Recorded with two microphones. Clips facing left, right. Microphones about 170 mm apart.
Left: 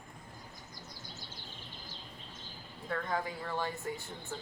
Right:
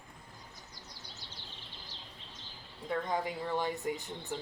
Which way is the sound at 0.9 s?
45° left (ahead or behind).